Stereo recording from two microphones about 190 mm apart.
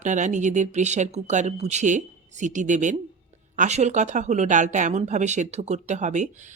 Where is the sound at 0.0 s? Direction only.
40° right (ahead or behind).